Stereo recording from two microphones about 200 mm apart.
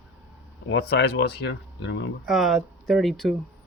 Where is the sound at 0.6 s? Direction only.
55° left (ahead or behind).